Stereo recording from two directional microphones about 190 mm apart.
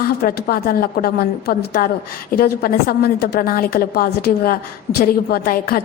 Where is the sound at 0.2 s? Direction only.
55° left (ahead or behind).